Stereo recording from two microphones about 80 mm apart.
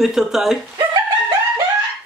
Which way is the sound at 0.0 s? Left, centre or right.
Centre.